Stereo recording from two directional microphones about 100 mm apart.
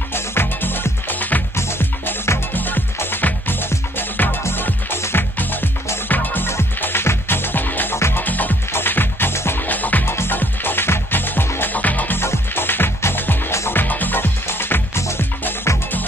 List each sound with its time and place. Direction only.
0.1 s music: 25° left (ahead or behind)